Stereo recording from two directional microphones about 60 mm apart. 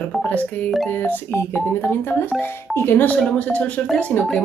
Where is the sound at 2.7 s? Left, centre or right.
Left.